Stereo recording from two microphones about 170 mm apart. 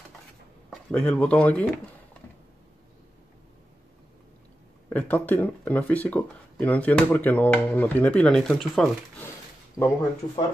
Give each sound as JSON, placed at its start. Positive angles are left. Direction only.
{"t": 0.7, "sound": "speech", "side_deg": 5}
{"t": 4.8, "sound": "speech", "side_deg": 10}
{"t": 9.8, "sound": "speech", "side_deg": 10}